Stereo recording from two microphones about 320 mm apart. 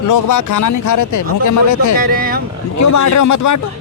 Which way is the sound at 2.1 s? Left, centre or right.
Right.